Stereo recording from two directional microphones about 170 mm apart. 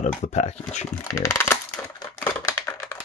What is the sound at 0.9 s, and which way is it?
Speech, 15° left (ahead or behind).